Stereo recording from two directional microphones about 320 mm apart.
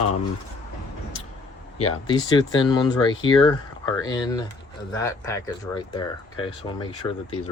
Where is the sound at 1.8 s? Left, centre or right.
Centre.